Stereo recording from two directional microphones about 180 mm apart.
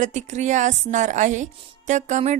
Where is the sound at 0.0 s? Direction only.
40° right (ahead or behind).